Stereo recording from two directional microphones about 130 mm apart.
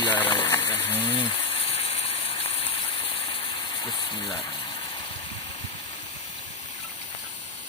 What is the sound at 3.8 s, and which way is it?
Speech, 40° left (ahead or behind).